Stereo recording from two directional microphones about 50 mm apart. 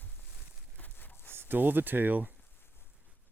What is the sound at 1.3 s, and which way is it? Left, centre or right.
Speech, right.